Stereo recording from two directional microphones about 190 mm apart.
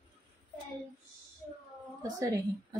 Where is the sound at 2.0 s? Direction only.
15° right (ahead or behind).